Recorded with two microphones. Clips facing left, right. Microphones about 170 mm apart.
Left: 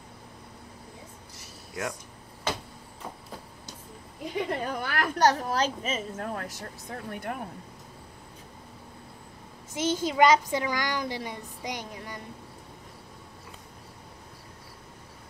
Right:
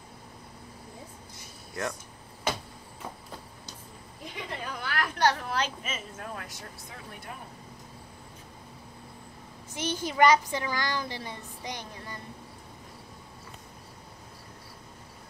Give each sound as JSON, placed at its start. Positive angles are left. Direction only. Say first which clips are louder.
{"t": 4.4, "sound": "a woman's voice", "louder": "left 8 dB", "side_deg": 45}
{"t": 9.8, "sound": "a child's voice", "louder": "left 2 dB", "side_deg": 20}